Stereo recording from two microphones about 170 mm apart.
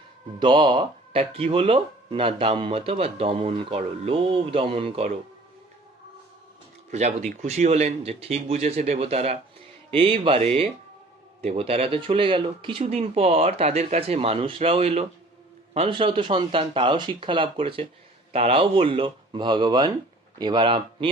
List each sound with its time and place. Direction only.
0.3 s speech: 30° right (ahead or behind)
6.9 s speech: 45° right (ahead or behind)